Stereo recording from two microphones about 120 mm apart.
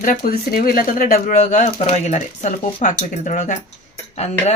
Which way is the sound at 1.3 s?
90° left.